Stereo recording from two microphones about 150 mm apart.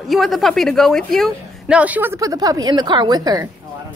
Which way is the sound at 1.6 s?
10° right (ahead or behind).